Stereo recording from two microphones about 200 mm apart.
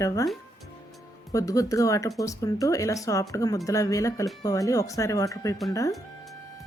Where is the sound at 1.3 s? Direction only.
15° left (ahead or behind).